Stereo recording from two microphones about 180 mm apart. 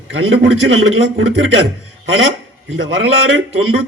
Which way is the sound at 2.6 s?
90° right.